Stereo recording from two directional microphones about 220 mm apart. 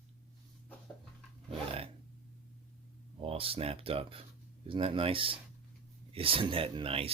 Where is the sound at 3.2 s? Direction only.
25° right (ahead or behind).